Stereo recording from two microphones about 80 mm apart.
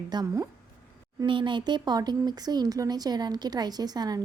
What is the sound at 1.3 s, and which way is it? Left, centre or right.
A woman's voice, right.